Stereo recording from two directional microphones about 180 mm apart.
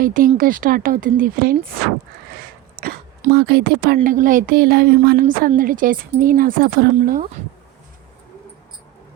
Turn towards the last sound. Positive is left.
turn(degrees=-55)  # may be behind; listen again after turning